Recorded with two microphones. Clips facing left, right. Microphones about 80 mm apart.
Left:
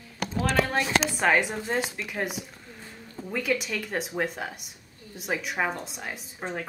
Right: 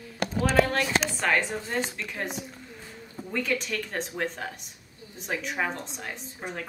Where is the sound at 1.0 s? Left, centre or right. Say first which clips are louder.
Left 3 dB; centre.